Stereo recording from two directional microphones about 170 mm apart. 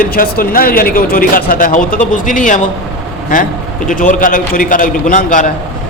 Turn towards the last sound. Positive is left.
turn(degrees=50)  # may be behind; listen again after turning